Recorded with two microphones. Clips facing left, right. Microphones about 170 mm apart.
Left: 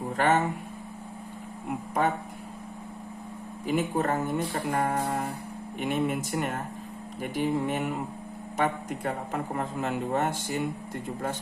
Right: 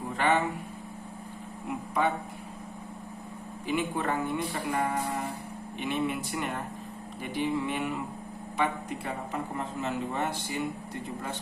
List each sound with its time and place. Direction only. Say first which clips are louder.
0.2 s a sound: left 2 dB; 45° left (ahead or behind)
2.0 s a man's voice: left 1 dB; 45° left (ahead or behind)
3.7 s a man's voice: left 3 dB; 40° left (ahead or behind)